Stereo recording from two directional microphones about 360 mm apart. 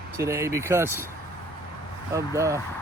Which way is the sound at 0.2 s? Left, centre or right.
Centre.